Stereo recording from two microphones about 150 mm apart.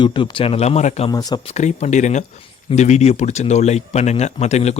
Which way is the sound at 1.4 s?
50° left (ahead or behind).